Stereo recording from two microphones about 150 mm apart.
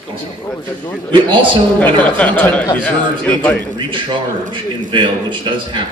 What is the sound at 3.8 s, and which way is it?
A man's voice, 30° right (ahead or behind).